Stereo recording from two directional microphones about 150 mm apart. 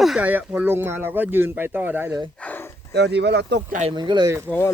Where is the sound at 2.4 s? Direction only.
15° left (ahead or behind).